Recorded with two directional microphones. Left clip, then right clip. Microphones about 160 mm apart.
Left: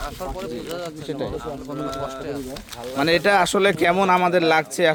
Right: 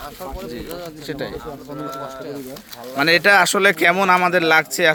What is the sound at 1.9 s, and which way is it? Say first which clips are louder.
Speech: left 1 dB; 35° left (ahead or behind).